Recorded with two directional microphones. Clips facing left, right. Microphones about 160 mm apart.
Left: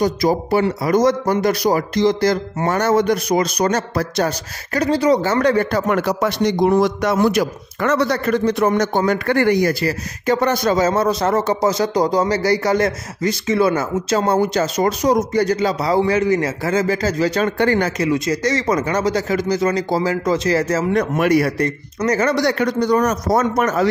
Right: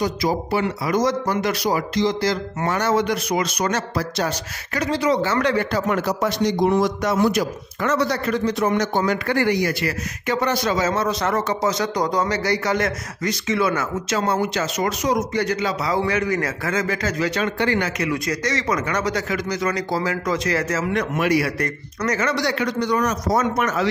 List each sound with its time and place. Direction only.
0.0 s speech: 40° left (ahead or behind)
3.9 s a man's voice: 55° left (ahead or behind)
4.7 s speech: 35° left (ahead or behind)
21.5 s speech: 30° left (ahead or behind)
22.3 s speech: 50° left (ahead or behind)